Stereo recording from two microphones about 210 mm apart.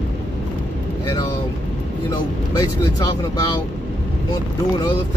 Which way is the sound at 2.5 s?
15° left (ahead or behind).